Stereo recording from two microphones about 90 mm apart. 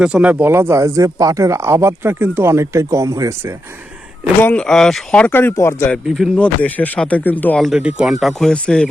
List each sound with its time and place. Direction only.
0.0 s speech: 10° right (ahead or behind); by 3.5 s 35° right (ahead or behind)
4.4 s speech: 15° left (ahead or behind)
5.2 s speech: 25° left (ahead or behind)
6.3 s speech: 15° left (ahead or behind)
7.6 s speech: 10° right (ahead or behind)
8.4 s speech: 5° left (ahead or behind)